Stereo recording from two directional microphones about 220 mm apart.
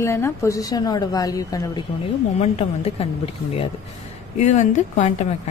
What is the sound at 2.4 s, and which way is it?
A woman's voice, 25° left (ahead or behind).